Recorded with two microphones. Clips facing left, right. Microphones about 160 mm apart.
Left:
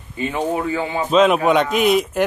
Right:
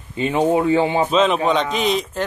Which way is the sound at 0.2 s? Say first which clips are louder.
Right 4 dB; 20° right (ahead or behind).